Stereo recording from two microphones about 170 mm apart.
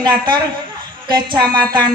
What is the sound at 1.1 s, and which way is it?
Speech, 25° right (ahead or behind).